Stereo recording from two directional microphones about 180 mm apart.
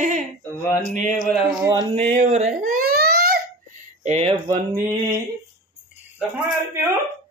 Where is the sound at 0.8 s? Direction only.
45° right (ahead or behind).